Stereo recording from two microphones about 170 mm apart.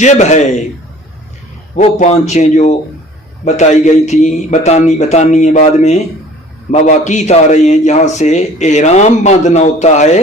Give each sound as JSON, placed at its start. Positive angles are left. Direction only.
{"t": 0.0, "sound": "a man's voice", "side_deg": 45}
{"t": 1.7, "sound": "a man's voice", "side_deg": 45}